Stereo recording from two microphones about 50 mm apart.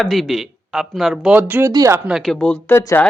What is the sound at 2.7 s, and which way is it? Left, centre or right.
Speech, left.